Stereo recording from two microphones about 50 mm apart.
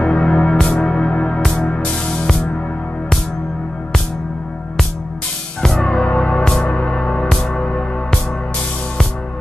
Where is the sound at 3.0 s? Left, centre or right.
Centre.